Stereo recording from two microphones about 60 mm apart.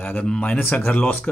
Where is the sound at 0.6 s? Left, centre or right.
Left.